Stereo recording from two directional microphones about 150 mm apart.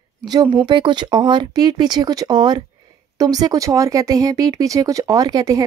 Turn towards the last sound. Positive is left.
turn(degrees=-25)  # may be behind; listen again after turning